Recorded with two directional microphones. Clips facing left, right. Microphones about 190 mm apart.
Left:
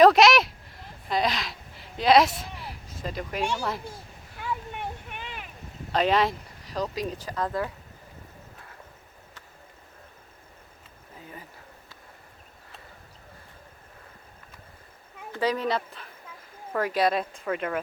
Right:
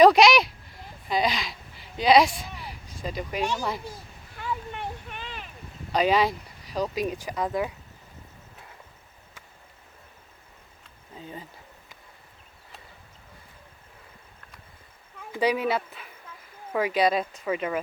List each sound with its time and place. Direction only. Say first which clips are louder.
0.0 s a sound: right 1 dB; centre (ahead or behind)
3.5 s speech: even; 5° right (ahead or behind)
4.7 s a sound: even; 15° left (ahead or behind)
5.9 s speech: right 1 dB; centre (ahead or behind)
11.2 s speech: right 4 dB; 25° right (ahead or behind)
15.3 s speech: right 2 dB; 15° right (ahead or behind)